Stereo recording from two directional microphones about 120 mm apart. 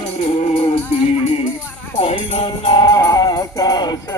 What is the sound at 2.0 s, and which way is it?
Music, 55° left (ahead or behind).